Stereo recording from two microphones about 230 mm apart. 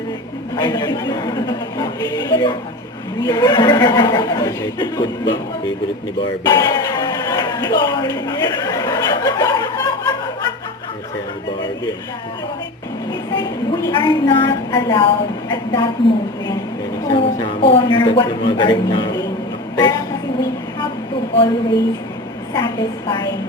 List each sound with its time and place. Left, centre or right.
0.5 s speech: centre
6.5 s speech: centre
13.1 s a woman's voice: centre
17.1 s a woman's voice: left
21.3 s a woman's voice: left